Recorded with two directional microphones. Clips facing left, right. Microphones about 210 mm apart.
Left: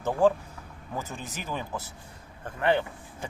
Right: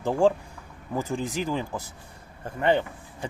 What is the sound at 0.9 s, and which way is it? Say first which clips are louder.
Speech: right 8 dB; 10° right (ahead or behind).